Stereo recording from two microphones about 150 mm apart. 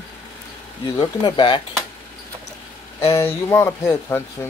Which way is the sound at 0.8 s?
30° left (ahead or behind).